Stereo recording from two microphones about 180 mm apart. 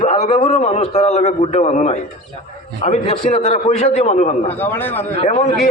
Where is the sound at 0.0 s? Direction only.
35° left (ahead or behind).